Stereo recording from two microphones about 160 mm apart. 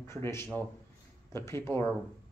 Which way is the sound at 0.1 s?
15° left (ahead or behind).